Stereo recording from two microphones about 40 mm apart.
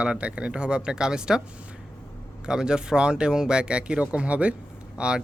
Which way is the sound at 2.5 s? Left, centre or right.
Centre.